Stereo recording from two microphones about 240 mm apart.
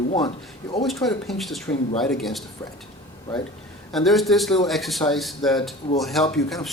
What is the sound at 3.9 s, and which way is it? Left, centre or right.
Speech, centre.